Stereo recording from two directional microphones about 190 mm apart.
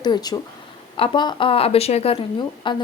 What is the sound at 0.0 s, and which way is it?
Speech, 20° left (ahead or behind).